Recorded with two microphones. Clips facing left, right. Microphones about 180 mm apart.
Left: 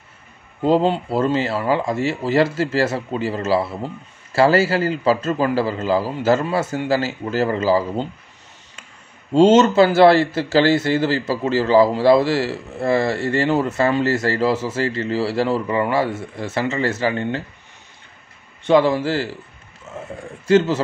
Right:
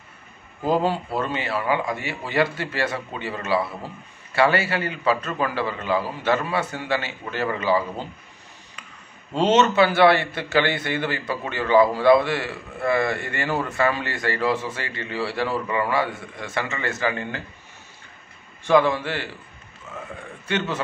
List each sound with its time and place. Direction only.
0.6 s a man's voice: 25° left (ahead or behind)
9.3 s a man's voice: 30° left (ahead or behind)
18.7 s speech: 25° left (ahead or behind)
19.9 s a sound: 25° left (ahead or behind)
20.4 s a man's voice: 30° left (ahead or behind)